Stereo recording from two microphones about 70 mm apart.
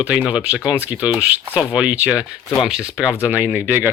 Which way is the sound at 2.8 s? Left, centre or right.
Centre.